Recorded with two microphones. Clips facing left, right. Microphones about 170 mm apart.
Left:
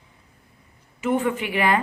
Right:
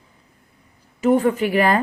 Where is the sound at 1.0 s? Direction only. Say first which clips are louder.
Right 6 dB; 40° right (ahead or behind).